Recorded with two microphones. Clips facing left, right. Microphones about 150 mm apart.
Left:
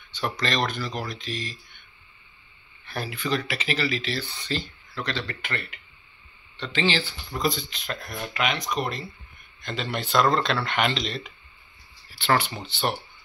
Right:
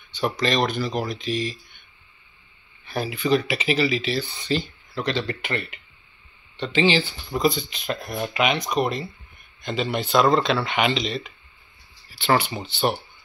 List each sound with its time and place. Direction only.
0.1 s speech: 10° right (ahead or behind)
2.9 s speech: 10° right (ahead or behind)